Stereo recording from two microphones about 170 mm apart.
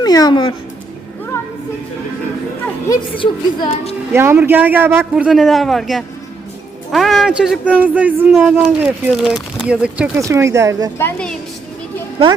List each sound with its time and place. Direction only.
0.0 s speech: 25° left (ahead or behind)
2.9 s a woman's voice: 30° left (ahead or behind)
4.1 s a man's voice: 15° right (ahead or behind)
8.3 s a man's voice: centre (ahead or behind)
10.2 s a man's voice: 15° right (ahead or behind)
10.9 s a woman's voice: 10° left (ahead or behind)